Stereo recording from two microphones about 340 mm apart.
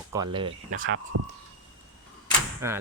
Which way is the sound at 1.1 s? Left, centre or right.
Right.